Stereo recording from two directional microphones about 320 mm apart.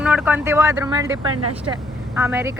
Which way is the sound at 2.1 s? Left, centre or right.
Centre.